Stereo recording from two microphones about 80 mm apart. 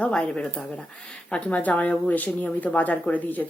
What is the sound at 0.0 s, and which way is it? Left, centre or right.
A woman's voice, centre.